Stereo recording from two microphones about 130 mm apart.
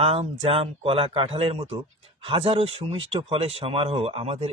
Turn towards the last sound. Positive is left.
turn(degrees=-50)  # may be behind; listen again after turning